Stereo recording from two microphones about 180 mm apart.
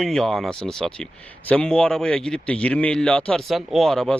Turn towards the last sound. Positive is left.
turn(degrees=0)  # may be behind; listen again after turning